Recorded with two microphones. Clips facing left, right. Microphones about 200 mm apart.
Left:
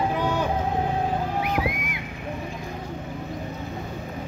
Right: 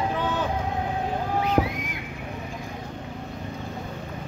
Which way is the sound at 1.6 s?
45° right (ahead or behind).